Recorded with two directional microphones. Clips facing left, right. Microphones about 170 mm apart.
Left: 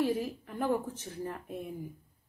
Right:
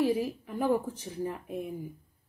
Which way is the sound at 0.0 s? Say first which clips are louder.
Right 3 dB; 10° right (ahead or behind).